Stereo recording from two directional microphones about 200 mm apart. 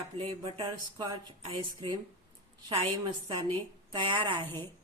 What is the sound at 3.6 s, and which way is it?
Speech, 25° right (ahead or behind).